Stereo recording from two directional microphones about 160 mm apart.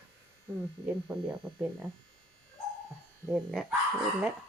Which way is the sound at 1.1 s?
15° right (ahead or behind).